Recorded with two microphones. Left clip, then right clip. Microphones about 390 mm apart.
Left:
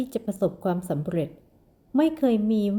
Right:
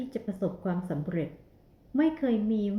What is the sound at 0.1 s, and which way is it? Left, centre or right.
Speech, left.